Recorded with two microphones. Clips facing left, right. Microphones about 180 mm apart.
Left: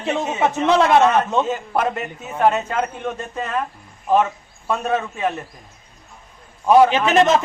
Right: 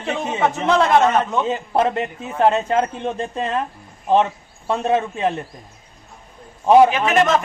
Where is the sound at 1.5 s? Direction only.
30° right (ahead or behind).